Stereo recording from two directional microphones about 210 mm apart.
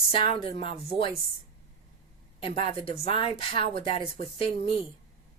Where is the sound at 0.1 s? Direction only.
25° left (ahead or behind).